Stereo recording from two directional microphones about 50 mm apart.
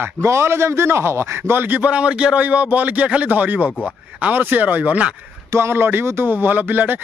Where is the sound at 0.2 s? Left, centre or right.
Right.